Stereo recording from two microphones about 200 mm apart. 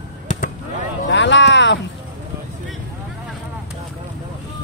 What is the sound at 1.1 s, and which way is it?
Speech, 65° left (ahead or behind).